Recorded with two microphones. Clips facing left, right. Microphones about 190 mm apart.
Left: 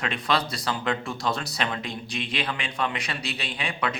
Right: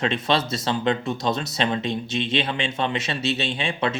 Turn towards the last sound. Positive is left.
turn(degrees=-25)  # may be behind; listen again after turning